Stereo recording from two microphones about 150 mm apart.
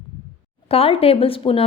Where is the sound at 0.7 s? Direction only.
40° left (ahead or behind).